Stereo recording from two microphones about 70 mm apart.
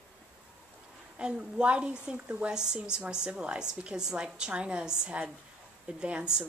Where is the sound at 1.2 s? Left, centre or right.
Centre.